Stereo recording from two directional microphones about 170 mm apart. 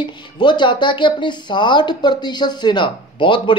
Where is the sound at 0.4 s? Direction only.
25° left (ahead or behind).